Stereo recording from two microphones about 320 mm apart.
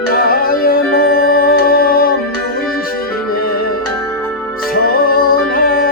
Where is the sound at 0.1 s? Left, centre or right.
Left.